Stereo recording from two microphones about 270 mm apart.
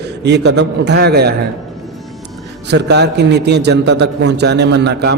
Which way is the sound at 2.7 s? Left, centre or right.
Right.